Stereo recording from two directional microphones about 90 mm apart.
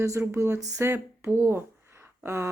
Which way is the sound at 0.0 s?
35° right (ahead or behind).